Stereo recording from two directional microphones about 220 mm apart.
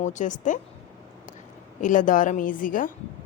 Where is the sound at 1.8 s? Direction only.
35° left (ahead or behind).